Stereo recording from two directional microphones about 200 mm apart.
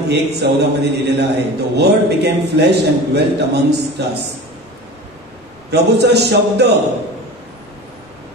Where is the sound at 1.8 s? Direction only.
55° right (ahead or behind).